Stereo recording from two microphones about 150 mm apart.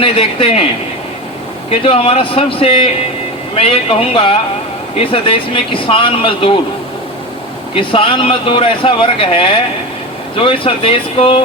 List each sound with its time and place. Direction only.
0.0 s speech: 40° left (ahead or behind)
1.7 s speech: 40° left (ahead or behind)
7.8 s speech: 35° left (ahead or behind)